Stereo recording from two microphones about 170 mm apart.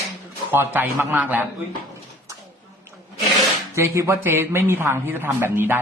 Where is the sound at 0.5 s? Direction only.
10° right (ahead or behind).